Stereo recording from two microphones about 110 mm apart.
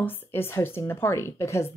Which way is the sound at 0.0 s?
20° left (ahead or behind).